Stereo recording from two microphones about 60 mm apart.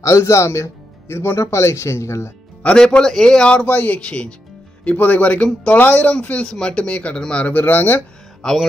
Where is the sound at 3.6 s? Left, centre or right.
Left.